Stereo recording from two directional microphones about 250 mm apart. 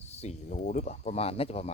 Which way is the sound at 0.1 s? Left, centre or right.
Left.